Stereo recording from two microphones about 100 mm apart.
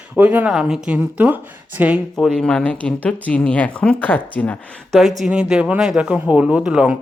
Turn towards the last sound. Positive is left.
turn(degrees=-10)  # may be behind; listen again after turning